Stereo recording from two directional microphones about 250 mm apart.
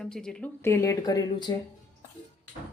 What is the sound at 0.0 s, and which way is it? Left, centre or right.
Speech, centre.